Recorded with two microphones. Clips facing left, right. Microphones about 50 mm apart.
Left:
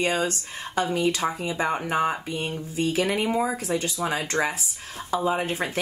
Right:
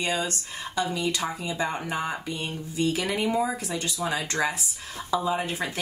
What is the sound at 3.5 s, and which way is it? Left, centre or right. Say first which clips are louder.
A woman's voice: left 4 dB; left.